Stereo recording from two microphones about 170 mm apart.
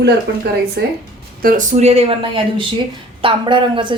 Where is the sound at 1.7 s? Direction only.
40° right (ahead or behind).